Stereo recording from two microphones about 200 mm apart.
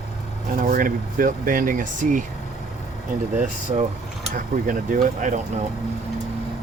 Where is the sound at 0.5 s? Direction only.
45° right (ahead or behind).